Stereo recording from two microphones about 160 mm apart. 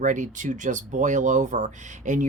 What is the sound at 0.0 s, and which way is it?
Speech, 50° right (ahead or behind).